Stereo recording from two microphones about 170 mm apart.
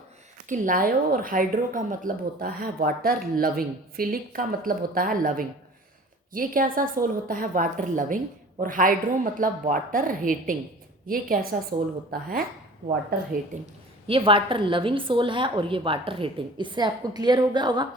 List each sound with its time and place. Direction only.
0.4 s a woman's voice: 50° right (ahead or behind)
14.1 s a woman's voice: 30° right (ahead or behind)